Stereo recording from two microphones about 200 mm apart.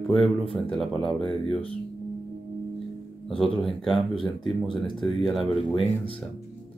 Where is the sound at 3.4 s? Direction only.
Centre (ahead or behind).